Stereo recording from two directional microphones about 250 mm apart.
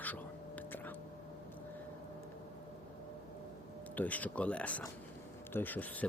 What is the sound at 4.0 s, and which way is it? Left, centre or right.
Speech, centre.